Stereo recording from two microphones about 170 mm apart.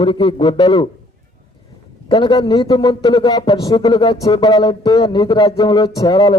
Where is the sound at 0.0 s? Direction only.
25° left (ahead or behind).